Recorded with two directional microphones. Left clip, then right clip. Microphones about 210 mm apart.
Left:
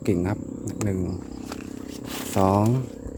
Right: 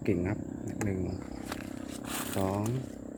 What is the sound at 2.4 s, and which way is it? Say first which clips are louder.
Speech: left 13 dB; 35° left (ahead or behind).